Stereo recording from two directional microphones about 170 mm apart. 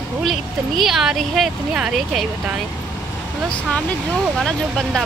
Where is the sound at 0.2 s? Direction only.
Centre (ahead or behind).